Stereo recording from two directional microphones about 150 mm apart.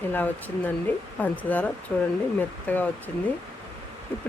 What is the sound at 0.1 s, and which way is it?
Speech, 10° left (ahead or behind).